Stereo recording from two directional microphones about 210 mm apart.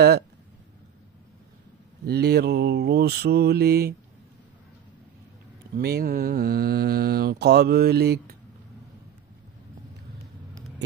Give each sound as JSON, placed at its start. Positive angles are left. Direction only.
{"t": 2.0, "sound": "speech", "side_deg": -50}
{"t": 5.8, "sound": "speech", "side_deg": -50}